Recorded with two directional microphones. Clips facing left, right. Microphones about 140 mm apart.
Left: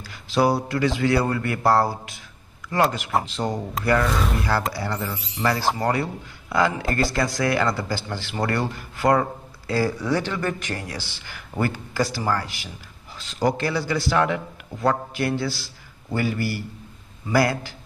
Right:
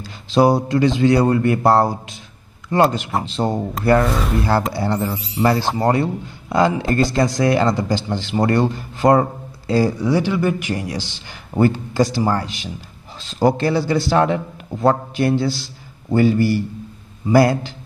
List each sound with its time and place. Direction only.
0.0 s a man's voice: 25° right (ahead or behind)
4.7 s a man's voice: 25° right (ahead or behind)